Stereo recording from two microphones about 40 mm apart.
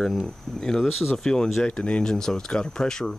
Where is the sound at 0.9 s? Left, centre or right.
Centre.